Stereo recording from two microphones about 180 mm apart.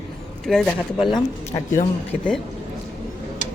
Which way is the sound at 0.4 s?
Centre (ahead or behind).